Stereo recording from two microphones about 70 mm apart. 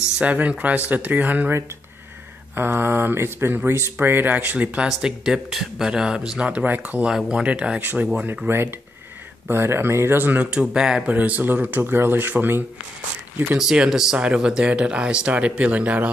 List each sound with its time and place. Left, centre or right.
0.2 s speech: right
2.5 s speech: right; by 6.5 s centre
6.5 s speech: right
7.1 s speech: centre
8.5 s speech: right; by 11.1 s centre
11.1 s speech: right
13.6 s speech: centre